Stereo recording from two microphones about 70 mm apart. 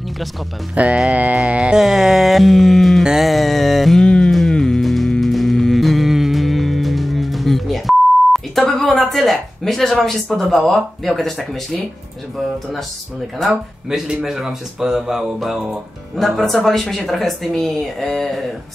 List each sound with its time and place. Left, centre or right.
0.8 s music: centre
1.4 s speech: centre
3.0 s music: centre
13.4 s speech: centre
16.2 s speech: centre